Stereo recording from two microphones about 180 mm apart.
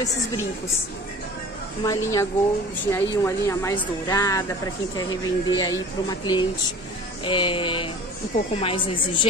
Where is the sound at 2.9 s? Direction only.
15° left (ahead or behind).